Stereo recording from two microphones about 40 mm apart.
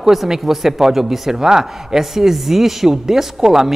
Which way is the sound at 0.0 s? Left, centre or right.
Centre.